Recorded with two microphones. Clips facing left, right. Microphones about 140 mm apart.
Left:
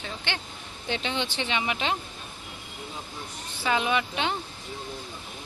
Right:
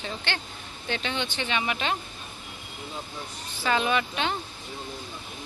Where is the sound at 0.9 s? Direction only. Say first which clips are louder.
Left 1 dB; 20° left (ahead or behind).